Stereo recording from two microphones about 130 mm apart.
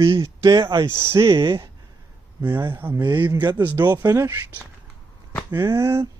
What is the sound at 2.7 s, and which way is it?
Speech, 15° right (ahead or behind).